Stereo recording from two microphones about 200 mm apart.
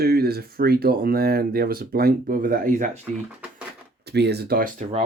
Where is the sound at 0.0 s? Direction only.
50° right (ahead or behind).